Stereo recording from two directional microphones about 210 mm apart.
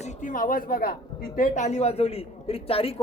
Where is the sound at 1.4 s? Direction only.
35° left (ahead or behind).